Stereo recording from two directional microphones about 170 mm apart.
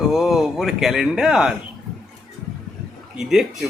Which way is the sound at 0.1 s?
Centre (ahead or behind).